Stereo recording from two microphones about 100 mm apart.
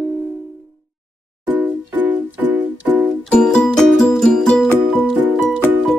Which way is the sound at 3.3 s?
5° left (ahead or behind).